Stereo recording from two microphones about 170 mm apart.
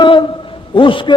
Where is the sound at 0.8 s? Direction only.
30° left (ahead or behind).